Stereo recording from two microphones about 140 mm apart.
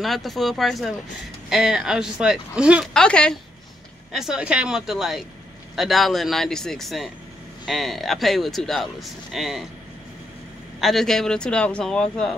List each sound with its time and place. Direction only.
0.0 s speech: centre (ahead or behind)
2.9 s speech: 5° left (ahead or behind)
4.1 s speech: 5° right (ahead or behind)
10.8 s speech: centre (ahead or behind)